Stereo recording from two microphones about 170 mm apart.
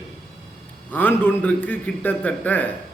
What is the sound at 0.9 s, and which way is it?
A man's voice, 10° left (ahead or behind).